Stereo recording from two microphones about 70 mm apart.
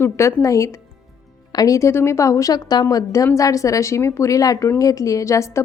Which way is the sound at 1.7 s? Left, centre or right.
Left.